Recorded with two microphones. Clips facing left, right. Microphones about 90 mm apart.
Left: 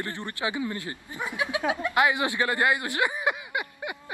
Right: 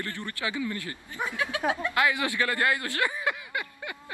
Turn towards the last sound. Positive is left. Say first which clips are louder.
# left 3 dB
turn(degrees=20)  # may be behind; listen again after turning